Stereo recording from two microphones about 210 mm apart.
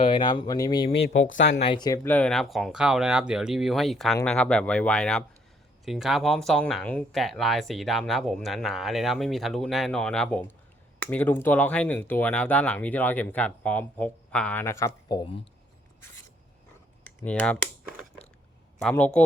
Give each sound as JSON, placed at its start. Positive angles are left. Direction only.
{"t": 0.0, "sound": "speech", "side_deg": 25}
{"t": 1.1, "sound": "speech", "side_deg": 60}
{"t": 1.6, "sound": "speech", "side_deg": 20}
{"t": 17.2, "sound": "speech", "side_deg": 5}
{"t": 18.8, "sound": "speech", "side_deg": 5}